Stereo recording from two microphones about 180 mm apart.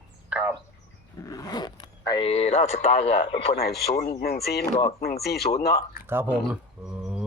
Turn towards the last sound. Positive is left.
turn(degrees=-5)  # may be behind; listen again after turning